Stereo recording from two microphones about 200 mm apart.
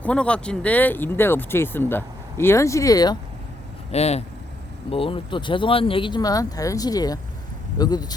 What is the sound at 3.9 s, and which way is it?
Speech, 30° left (ahead or behind).